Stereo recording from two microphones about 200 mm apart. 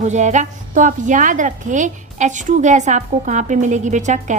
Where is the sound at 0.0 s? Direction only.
35° right (ahead or behind).